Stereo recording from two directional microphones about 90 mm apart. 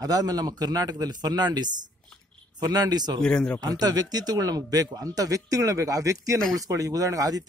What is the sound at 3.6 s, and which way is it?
A man's voice, 45° right (ahead or behind).